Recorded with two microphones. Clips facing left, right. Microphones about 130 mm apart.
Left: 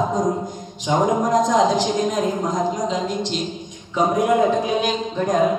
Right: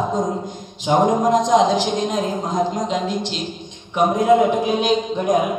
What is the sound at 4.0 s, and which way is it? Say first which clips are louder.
A man's voice: right 2 dB; 20° right (ahead or behind).